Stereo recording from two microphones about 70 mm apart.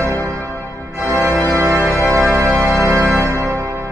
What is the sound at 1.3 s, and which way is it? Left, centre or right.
Organ, left.